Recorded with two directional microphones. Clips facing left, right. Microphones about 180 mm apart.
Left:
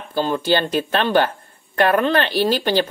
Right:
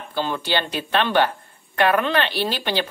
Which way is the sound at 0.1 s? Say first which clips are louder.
Left 5 dB; 40° left (ahead or behind).